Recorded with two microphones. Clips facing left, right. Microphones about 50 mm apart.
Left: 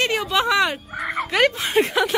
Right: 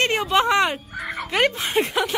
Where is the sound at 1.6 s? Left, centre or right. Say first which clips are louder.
Left 3 dB; left.